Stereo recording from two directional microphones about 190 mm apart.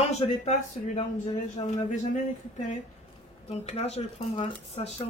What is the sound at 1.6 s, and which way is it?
Speech, 25° left (ahead or behind).